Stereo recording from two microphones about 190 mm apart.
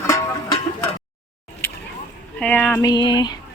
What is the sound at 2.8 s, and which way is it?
Speech, 20° left (ahead or behind).